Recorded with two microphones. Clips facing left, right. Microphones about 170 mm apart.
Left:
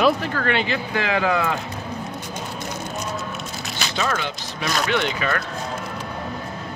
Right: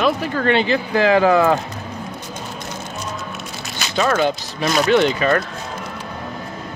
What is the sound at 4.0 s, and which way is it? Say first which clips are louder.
Speech: right 9 dB; 45° right (ahead or behind).